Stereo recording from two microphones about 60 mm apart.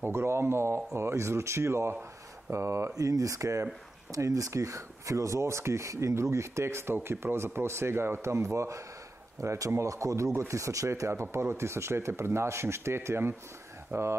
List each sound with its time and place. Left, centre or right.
0.0 s speech: right
3.0 s speech: right
4.1 s speech: right